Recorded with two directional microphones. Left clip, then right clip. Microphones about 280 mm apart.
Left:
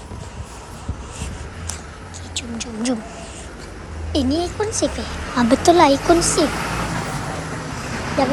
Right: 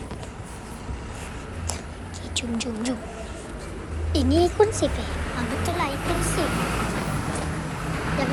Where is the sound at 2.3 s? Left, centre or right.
Centre.